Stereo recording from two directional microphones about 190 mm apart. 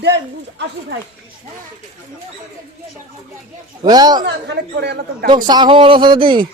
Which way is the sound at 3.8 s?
20° right (ahead or behind).